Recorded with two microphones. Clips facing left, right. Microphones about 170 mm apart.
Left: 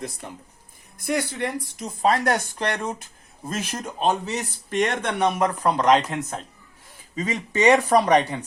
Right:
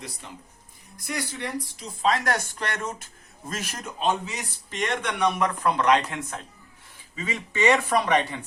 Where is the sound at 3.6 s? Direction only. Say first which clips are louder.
Left 4 dB; 30° left (ahead or behind).